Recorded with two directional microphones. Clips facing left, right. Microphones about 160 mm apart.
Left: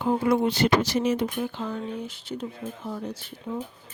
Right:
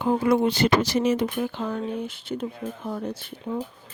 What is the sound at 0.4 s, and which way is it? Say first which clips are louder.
Speech: right 1 dB; 90° right.